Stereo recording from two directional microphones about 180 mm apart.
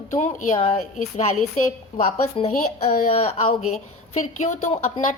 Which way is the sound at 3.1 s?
35° left (ahead or behind).